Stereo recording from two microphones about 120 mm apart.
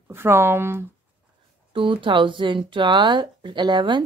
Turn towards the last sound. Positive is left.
turn(degrees=-40)  # may be behind; listen again after turning